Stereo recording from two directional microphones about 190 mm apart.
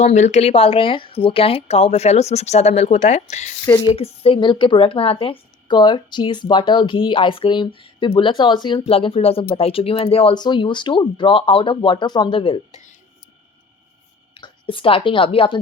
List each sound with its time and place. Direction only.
0.0 s speech: 35° left (ahead or behind)
14.3 s speech: 25° left (ahead or behind)